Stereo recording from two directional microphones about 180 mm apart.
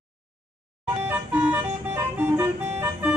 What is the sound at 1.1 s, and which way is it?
Music, 10° right (ahead or behind).